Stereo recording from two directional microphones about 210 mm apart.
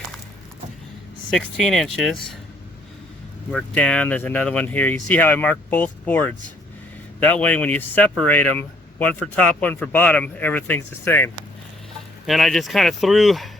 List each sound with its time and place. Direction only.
1.3 s speech: 5° left (ahead or behind)
3.5 s speech: 5° left (ahead or behind)
12.2 s speech: centre (ahead or behind)